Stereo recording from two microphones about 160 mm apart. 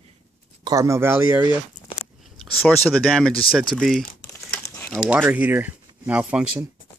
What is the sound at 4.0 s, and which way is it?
Crumpling, 15° left (ahead or behind).